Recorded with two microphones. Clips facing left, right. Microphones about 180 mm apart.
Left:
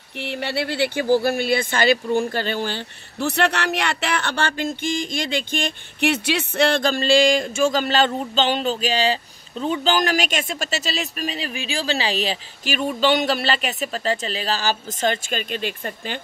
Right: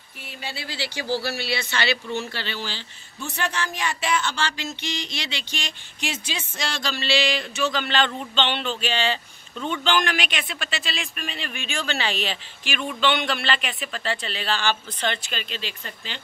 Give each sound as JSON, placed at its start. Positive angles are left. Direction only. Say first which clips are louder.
{"t": 0.2, "sound": "speech", "louder": "left 11 dB", "side_deg": 70}